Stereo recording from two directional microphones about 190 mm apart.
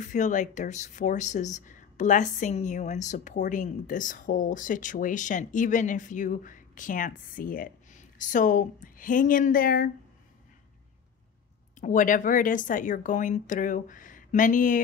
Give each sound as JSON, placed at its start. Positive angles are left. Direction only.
{"t": 0.0, "sound": "speech", "side_deg": 40}
{"t": 11.8, "sound": "speech", "side_deg": 45}